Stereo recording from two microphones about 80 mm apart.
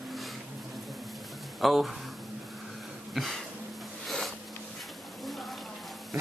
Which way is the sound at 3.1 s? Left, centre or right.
Centre.